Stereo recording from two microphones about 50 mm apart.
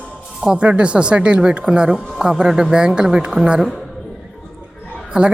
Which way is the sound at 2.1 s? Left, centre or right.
Centre.